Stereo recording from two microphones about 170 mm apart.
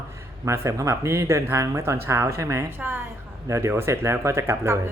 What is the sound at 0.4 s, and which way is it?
Speech, 15° right (ahead or behind).